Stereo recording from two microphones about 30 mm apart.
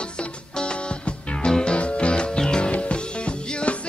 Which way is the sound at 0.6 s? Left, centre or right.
Left.